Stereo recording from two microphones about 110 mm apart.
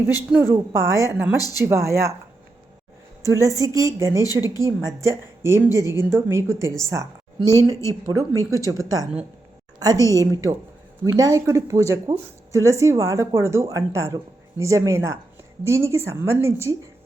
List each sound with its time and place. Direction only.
0.3 s speech: 20° right (ahead or behind)
1.4 s speech: 35° left (ahead or behind)
1.6 s speech: 25° right (ahead or behind)
3.2 s a woman's voice: 30° right (ahead or behind)
8.5 s a woman's voice: 30° left (ahead or behind)
10.2 s a woman's voice: 35° right (ahead or behind)